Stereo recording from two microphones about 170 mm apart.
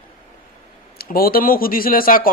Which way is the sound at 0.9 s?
60° left (ahead or behind).